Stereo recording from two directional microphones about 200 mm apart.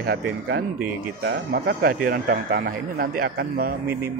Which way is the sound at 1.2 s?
50° right (ahead or behind).